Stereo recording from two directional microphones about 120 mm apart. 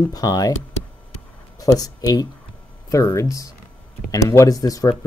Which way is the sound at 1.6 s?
30° left (ahead or behind).